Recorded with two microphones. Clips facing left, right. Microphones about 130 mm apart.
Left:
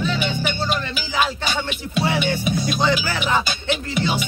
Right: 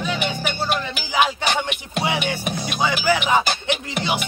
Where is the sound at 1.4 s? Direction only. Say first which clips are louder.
Right 2 dB; 60° right (ahead or behind).